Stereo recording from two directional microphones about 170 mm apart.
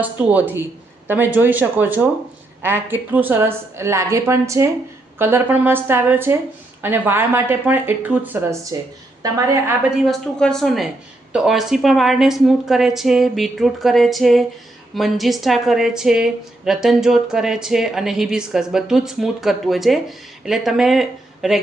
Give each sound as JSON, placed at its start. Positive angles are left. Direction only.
{"t": 0.0, "sound": "a woman's voice", "side_deg": -10}
{"t": 9.9, "sound": "a woman's voice", "side_deg": 0}